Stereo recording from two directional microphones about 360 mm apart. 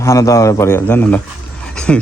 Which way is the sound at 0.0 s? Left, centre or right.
Centre.